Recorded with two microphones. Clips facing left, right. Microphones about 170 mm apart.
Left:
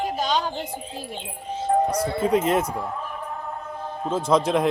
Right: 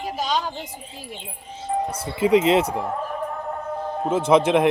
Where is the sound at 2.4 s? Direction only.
80° right.